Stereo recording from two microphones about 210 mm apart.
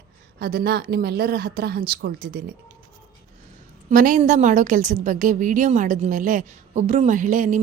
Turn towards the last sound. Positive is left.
turn(degrees=-40)  # may be behind; listen again after turning